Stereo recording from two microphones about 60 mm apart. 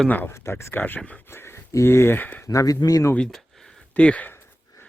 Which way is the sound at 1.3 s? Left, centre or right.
Left.